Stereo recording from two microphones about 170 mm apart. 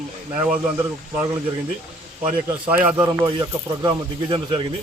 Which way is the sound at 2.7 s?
10° right (ahead or behind).